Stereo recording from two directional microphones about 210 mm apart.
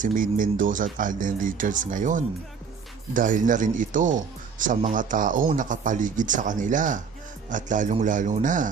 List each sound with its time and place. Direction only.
0.0 s speech: 40° right (ahead or behind)